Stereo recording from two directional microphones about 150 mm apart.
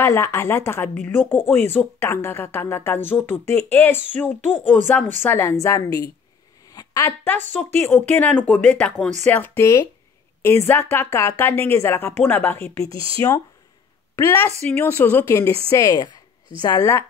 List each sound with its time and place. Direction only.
0.0 s speech: 20° left (ahead or behind)
6.7 s a sound: 25° left (ahead or behind)
7.8 s speech: 15° left (ahead or behind)
12.9 s speech: 35° right (ahead or behind)
14.1 s speech: 15° left (ahead or behind)
16.6 s speech: 20° left (ahead or behind)